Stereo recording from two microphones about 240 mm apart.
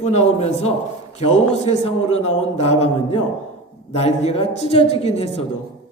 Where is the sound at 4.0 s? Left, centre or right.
Left.